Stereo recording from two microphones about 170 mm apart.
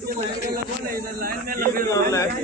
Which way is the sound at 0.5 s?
55° right (ahead or behind).